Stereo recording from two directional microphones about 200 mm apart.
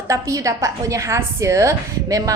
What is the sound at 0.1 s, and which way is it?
A woman's voice, 15° right (ahead or behind).